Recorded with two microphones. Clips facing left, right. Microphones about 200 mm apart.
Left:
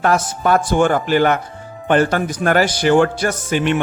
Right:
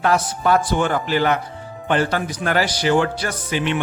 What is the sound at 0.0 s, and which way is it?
Speech, 45° left (ahead or behind).